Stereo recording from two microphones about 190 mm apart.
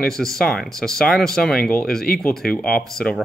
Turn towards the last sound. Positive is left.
turn(degrees=0)  # may be behind; listen again after turning